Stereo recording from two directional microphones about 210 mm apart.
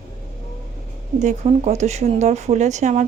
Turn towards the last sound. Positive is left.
turn(degrees=-35)  # may be behind; listen again after turning